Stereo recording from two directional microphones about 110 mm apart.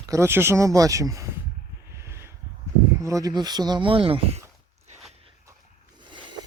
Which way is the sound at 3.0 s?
30° right (ahead or behind).